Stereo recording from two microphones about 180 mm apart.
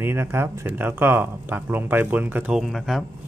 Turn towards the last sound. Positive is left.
turn(degrees=0)  # may be behind; listen again after turning